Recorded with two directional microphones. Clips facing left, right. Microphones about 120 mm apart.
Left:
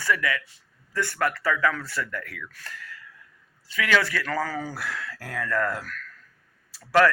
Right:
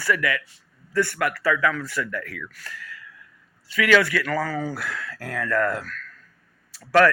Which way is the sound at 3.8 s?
25° left (ahead or behind).